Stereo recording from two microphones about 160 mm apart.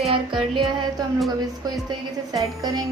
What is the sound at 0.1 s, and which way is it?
Music, 30° right (ahead or behind).